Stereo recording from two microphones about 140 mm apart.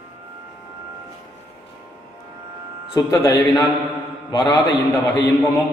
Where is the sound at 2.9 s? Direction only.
25° left (ahead or behind).